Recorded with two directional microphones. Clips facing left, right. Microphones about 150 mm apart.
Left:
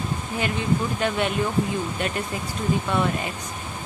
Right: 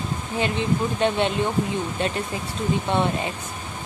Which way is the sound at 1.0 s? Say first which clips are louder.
Right 2 dB; 30° right (ahead or behind).